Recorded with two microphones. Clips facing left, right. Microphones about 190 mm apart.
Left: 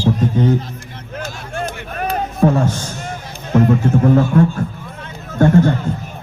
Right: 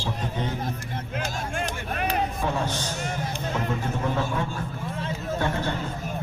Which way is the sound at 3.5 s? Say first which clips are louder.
Left 17 dB; 45° left (ahead or behind).